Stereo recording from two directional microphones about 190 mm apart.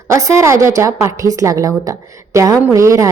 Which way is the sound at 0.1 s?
15° right (ahead or behind).